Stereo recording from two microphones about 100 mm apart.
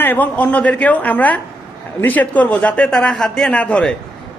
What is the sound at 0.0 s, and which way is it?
Speech, 15° left (ahead or behind).